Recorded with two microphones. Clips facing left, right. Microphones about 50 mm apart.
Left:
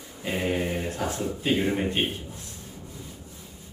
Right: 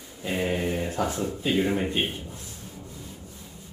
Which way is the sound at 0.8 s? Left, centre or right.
Centre.